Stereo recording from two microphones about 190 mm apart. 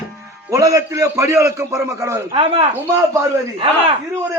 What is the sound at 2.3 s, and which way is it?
Speech, 30° right (ahead or behind).